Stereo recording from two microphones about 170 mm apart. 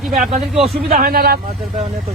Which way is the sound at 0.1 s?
40° right (ahead or behind).